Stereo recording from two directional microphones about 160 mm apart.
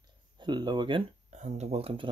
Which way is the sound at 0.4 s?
25° right (ahead or behind).